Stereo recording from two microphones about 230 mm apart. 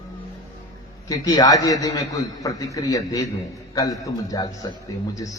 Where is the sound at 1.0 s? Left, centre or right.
Centre.